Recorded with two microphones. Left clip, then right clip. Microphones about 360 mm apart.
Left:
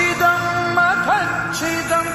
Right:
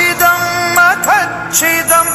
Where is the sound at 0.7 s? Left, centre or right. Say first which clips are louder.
Right 7 dB; right.